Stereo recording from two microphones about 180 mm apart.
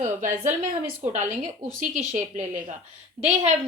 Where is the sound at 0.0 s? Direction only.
45° right (ahead or behind).